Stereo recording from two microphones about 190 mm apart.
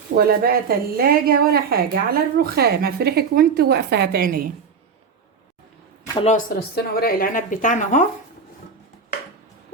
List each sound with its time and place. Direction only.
0.2 s a woman's voice: 50° right (ahead or behind)
6.6 s speech: 55° left (ahead or behind)